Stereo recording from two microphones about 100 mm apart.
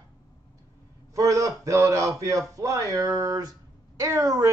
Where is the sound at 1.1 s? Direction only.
35° right (ahead or behind).